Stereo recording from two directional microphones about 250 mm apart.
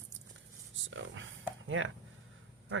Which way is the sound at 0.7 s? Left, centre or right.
Right.